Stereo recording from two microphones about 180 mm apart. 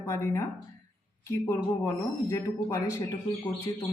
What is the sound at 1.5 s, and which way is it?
Speech, 15° left (ahead or behind).